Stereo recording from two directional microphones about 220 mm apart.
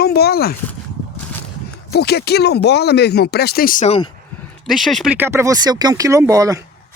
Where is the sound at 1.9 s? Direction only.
45° left (ahead or behind); by 4.1 s 30° left (ahead or behind).